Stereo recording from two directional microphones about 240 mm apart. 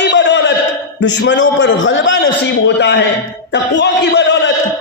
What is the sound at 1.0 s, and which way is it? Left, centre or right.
A man's voice, left.